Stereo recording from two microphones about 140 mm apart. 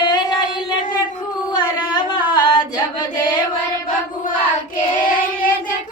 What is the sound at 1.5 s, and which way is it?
Singing, 30° left (ahead or behind).